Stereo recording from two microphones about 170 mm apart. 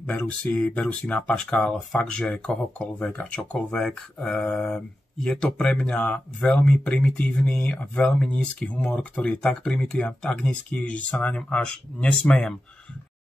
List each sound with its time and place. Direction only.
0.0 s speech: 5° left (ahead or behind)